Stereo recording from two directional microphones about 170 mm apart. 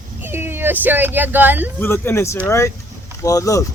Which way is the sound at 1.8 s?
15° left (ahead or behind).